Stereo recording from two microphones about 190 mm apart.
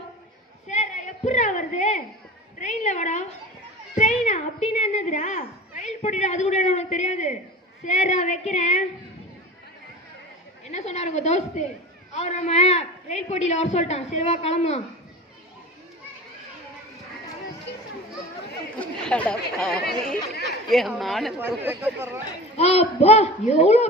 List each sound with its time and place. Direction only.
0.7 s a sound: 40° left (ahead or behind)
10.7 s a man's voice: 35° left (ahead or behind)
18.8 s speech: 5° left (ahead or behind)
19.8 s speech: 55° left (ahead or behind)
20.4 s speech: centre (ahead or behind)
21.6 s speech: 10° right (ahead or behind)
22.5 s a man's voice: 35° left (ahead or behind)